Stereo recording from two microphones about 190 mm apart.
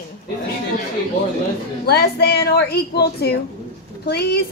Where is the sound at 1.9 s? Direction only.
55° left (ahead or behind).